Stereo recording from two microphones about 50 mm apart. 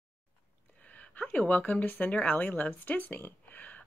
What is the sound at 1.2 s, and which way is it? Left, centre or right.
Speech, left.